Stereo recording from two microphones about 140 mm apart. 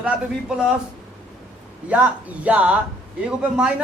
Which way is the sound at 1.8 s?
10° right (ahead or behind).